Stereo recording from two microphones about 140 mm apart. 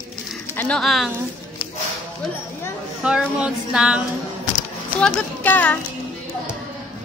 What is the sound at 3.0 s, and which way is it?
A woman's voice, 5° right (ahead or behind).